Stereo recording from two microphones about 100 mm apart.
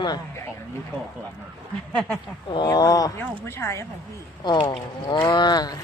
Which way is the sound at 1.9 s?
10° left (ahead or behind).